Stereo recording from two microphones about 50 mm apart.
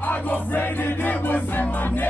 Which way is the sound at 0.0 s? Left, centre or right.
Left.